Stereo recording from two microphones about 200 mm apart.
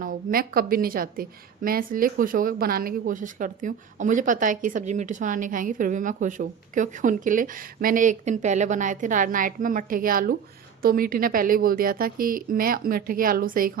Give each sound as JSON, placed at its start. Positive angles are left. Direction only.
{"t": 0.0, "sound": "a woman's voice", "side_deg": -45}